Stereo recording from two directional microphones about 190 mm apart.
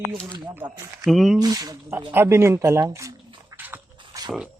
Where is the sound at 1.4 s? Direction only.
20° right (ahead or behind).